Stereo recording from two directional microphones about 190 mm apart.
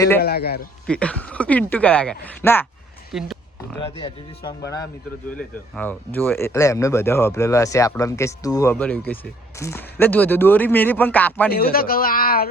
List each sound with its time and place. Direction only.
0.2 s a man's voice: 55° left (ahead or behind)
0.9 s speech: 5° left (ahead or behind)
3.1 s speech: centre (ahead or behind)
3.8 s speech: 25° left (ahead or behind)
5.3 s speech: 5° left (ahead or behind)
8.7 s speech: 5° left (ahead or behind)
11.5 s speech: 50° left (ahead or behind)